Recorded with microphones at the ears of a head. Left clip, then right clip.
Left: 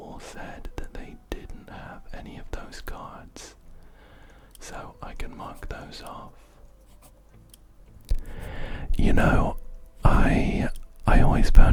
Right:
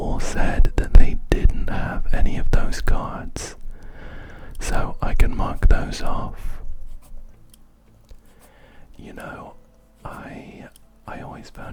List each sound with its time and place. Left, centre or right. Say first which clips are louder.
0.0 s whispering: right 13 dB; right
8.0 s whispering: left 11 dB; left